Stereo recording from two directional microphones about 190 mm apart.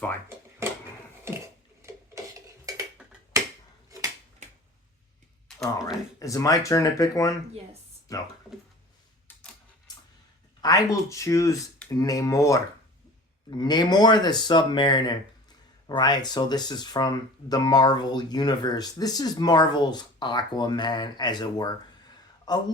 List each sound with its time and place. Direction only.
2.7 s tick-tock: 20° right (ahead or behind)
5.8 s speech: 15° left (ahead or behind)
10.6 s speech: 20° left (ahead or behind)